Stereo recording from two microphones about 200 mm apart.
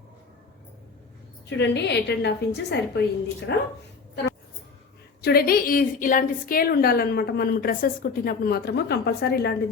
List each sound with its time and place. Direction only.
1.5 s a woman's voice: 60° left (ahead or behind)
5.2 s a woman's voice: 50° left (ahead or behind)